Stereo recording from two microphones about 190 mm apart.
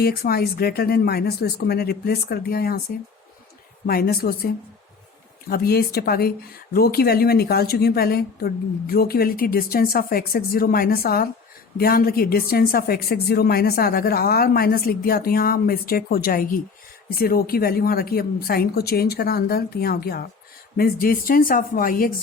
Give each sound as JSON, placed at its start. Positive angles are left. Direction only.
{"t": 0.0, "sound": "speech", "side_deg": 55}
{"t": 3.8, "sound": "speech", "side_deg": 55}